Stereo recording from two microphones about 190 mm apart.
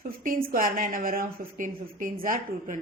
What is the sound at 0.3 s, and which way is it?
A woman's voice, 50° right (ahead or behind).